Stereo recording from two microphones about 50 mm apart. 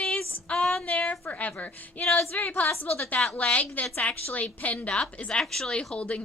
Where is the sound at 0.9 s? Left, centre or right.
Left.